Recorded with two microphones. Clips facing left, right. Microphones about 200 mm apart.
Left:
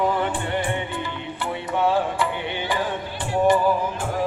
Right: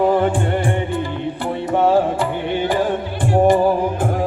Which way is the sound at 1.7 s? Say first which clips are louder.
Right 6 dB; 45° right (ahead or behind).